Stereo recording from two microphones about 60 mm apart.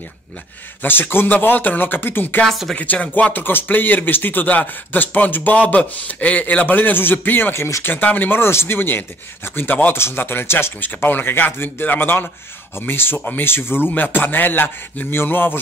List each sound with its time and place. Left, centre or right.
0.8 s speech: left
7.5 s speech: left
7.9 s speech: left
9.9 s speech: left
10.9 s speech: left